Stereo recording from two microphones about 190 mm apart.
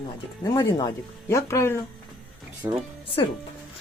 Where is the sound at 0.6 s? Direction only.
20° left (ahead or behind).